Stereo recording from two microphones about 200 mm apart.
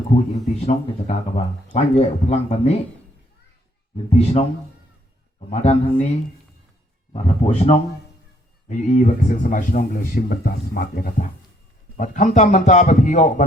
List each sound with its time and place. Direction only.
0.3 s speech: 35° left (ahead or behind)
4.1 s speech: 30° left (ahead or behind)
5.5 s speech: 30° left (ahead or behind)
7.1 s speech: 30° left (ahead or behind)